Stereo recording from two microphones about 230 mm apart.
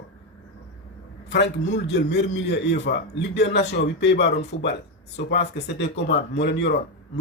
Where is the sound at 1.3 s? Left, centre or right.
Left.